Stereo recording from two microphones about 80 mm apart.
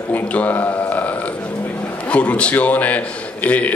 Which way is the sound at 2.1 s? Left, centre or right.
Centre.